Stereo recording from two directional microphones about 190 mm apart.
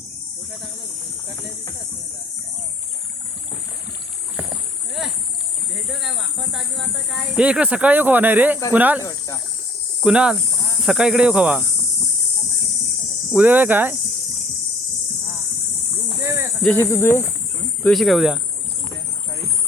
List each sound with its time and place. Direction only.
5.9 s speech: centre (ahead or behind)
9.0 s speech: 15° left (ahead or behind)
10.0 s speech: 5° right (ahead or behind)
13.3 s speech: 10° right (ahead or behind)
16.0 s snake: 10° right (ahead or behind)
16.7 s speech: 15° left (ahead or behind)
17.8 s speech: centre (ahead or behind)